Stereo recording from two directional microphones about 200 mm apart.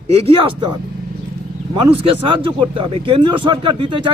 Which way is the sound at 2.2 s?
25° right (ahead or behind).